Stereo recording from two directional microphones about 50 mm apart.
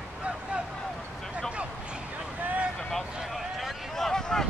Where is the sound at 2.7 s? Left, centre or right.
Centre.